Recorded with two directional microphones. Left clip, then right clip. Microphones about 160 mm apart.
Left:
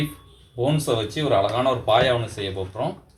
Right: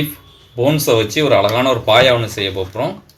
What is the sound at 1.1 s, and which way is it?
Speech, 55° right (ahead or behind).